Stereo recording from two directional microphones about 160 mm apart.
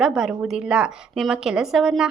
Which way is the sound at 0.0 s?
5° right (ahead or behind).